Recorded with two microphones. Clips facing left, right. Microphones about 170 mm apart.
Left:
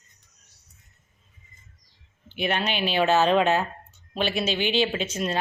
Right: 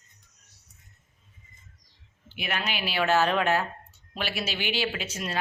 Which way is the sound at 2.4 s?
30° left (ahead or behind).